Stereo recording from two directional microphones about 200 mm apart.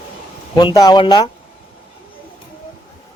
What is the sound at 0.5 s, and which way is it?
Speech, 20° left (ahead or behind).